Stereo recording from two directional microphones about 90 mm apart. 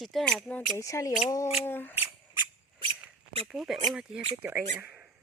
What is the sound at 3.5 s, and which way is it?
Speech, 5° right (ahead or behind).